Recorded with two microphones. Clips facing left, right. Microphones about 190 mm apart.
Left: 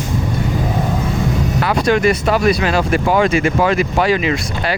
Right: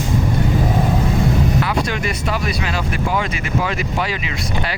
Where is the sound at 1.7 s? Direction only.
55° left (ahead or behind).